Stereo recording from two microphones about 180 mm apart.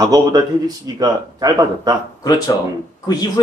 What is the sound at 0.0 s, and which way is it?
Speech, 20° right (ahead or behind).